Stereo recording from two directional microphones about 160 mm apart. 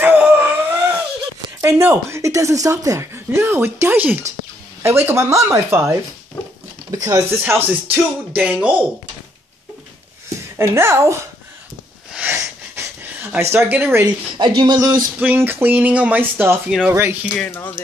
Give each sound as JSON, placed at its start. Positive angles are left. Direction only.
{"t": 0.0, "sound": "a sound", "side_deg": -10}
{"t": 1.6, "sound": "speech", "side_deg": -15}
{"t": 10.6, "sound": "speech", "side_deg": -15}
{"t": 12.1, "sound": "a sound", "side_deg": -10}
{"t": 14.3, "sound": "speech", "side_deg": -30}
{"t": 17.6, "sound": "speech", "side_deg": 10}